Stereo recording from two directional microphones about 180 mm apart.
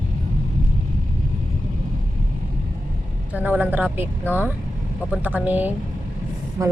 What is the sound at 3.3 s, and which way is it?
Speech, 10° right (ahead or behind).